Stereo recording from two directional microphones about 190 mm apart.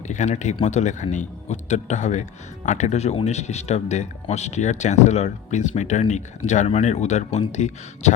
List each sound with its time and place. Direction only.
0.1 s speech: 40° left (ahead or behind)